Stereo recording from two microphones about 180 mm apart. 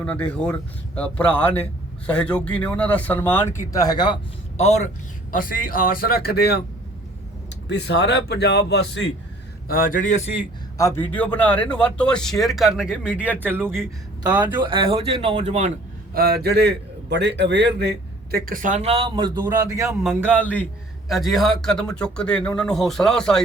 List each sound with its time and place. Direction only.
0.0 s speech: 5° left (ahead or behind); by 4.1 s 20° left (ahead or behind)
4.5 s a man's voice: 35° left (ahead or behind)
5.3 s speech: 50° left (ahead or behind)
7.7 s a man's voice: 70° left (ahead or behind)
9.6 s speech: 50° left (ahead or behind)
10.8 s speech: 15° left (ahead or behind); by 13.8 s 10° right (ahead or behind)
14.3 s speech: 25° right (ahead or behind)
16.1 s a man's voice: 60° right (ahead or behind); by 20.0 s 20° right (ahead or behind)
20.0 s speech: 5° left (ahead or behind)